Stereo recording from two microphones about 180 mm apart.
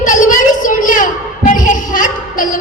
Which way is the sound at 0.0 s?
45° left (ahead or behind).